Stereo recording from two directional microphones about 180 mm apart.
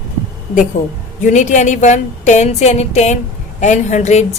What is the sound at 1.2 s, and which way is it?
A woman's voice, 45° left (ahead or behind).